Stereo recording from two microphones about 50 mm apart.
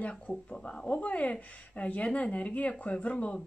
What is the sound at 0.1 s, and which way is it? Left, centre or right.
Speech, centre.